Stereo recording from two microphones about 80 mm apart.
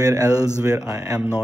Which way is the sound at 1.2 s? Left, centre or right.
Centre.